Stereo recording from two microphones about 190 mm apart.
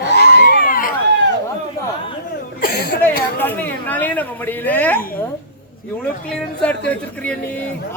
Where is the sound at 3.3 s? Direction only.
10° left (ahead or behind).